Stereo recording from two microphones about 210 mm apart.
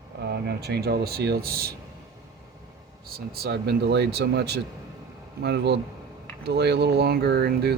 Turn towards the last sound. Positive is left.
turn(degrees=-50)  # may be behind; listen again after turning